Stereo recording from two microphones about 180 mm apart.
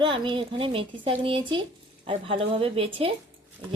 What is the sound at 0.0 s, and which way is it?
A woman's voice, 30° right (ahead or behind).